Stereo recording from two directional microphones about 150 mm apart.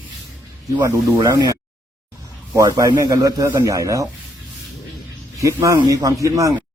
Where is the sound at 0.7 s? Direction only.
25° right (ahead or behind).